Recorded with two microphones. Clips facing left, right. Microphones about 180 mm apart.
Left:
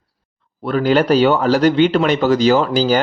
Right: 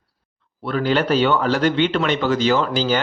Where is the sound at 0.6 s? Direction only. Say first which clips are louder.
Left 5 dB; 40° left (ahead or behind).